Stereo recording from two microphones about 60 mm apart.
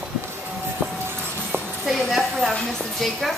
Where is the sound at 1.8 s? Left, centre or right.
Centre.